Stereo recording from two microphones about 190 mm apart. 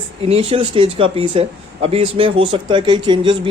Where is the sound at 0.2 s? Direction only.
30° right (ahead or behind).